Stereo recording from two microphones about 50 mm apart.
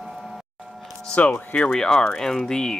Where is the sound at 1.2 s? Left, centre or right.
Left.